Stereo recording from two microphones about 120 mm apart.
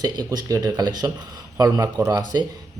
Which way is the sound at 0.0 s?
35° right (ahead or behind).